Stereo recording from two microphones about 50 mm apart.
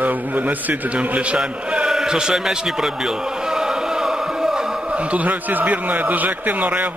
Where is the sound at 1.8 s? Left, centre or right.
Centre.